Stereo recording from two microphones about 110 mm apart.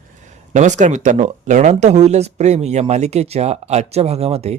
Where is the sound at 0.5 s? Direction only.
90° right.